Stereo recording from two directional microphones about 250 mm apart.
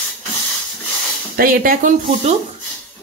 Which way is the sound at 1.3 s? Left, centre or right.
Right.